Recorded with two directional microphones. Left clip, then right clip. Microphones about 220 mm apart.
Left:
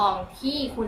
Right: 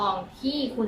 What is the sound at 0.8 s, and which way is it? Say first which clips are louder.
Speech: right 2 dB; 15° left (ahead or behind).